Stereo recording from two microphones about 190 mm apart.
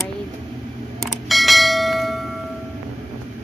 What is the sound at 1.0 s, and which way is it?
Bell, centre (ahead or behind).